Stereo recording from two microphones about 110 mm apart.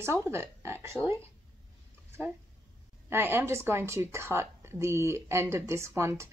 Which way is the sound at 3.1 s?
20° right (ahead or behind).